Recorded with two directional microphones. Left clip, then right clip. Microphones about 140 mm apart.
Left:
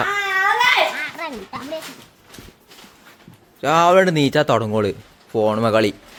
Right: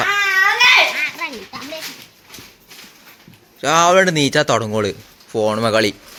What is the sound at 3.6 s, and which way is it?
Speech, 15° left (ahead or behind).